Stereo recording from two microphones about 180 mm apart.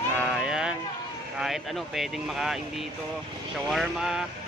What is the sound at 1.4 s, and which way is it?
Speech, centre (ahead or behind).